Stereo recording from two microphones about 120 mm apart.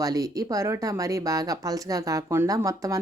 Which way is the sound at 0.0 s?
30° right (ahead or behind).